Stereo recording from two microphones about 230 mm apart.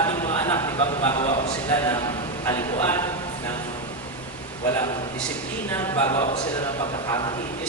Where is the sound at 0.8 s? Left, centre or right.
Left.